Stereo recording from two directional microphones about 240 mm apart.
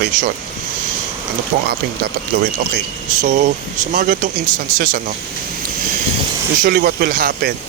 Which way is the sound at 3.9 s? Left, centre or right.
Right.